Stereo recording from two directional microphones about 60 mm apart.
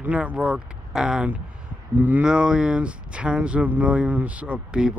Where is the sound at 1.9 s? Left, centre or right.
Right.